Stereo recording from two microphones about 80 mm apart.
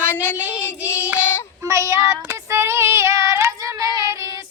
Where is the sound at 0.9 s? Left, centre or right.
Left.